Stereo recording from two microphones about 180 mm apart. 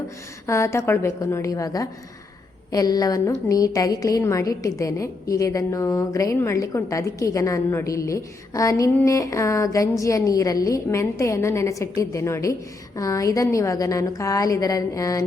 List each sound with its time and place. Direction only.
0.4 s a woman's voice: 15° left (ahead or behind)